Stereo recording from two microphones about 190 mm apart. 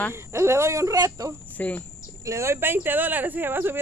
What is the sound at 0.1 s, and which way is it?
Speech, 15° right (ahead or behind).